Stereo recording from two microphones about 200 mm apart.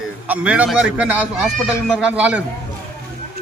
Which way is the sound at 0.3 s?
5° right (ahead or behind).